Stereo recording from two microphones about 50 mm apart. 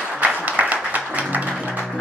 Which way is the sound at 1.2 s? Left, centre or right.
Right.